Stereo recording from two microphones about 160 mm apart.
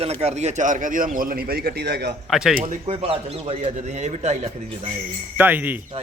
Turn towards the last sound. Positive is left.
turn(degrees=-10)  # may be behind; listen again after turning